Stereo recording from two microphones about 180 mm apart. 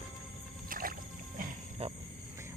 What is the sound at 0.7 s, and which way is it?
Music, 50° right (ahead or behind).